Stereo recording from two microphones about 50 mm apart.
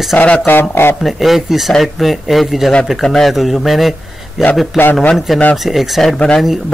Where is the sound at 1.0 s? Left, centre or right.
Centre.